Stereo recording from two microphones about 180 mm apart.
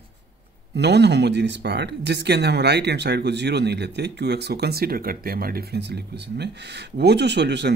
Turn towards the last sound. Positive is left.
turn(degrees=-70)  # may be behind; listen again after turning